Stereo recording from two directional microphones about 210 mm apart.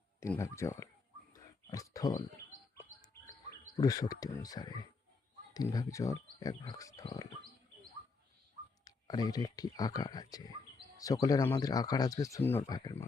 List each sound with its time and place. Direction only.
0.2 s speech: 15° left (ahead or behind)
1.3 s a sound: 15° left (ahead or behind)
3.8 s speech: 15° left (ahead or behind)
8.8 s speech: 20° left (ahead or behind)